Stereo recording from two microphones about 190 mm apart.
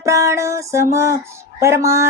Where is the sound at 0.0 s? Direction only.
15° right (ahead or behind).